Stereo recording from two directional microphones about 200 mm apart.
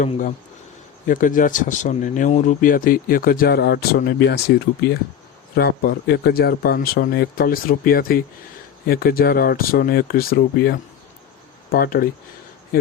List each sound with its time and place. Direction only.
0.0 s speech: 40° left (ahead or behind)